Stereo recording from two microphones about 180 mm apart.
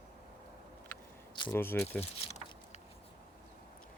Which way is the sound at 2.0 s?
35° left (ahead or behind).